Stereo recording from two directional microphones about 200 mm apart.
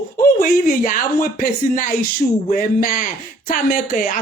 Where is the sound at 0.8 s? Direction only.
45° left (ahead or behind).